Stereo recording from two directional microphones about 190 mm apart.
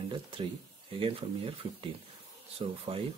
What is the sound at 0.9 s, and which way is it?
Speech, 30° right (ahead or behind).